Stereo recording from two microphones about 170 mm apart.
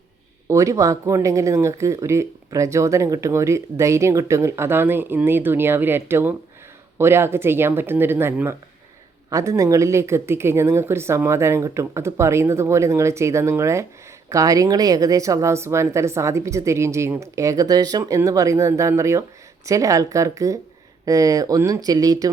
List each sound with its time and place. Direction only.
0.4 s speech: 15° right (ahead or behind)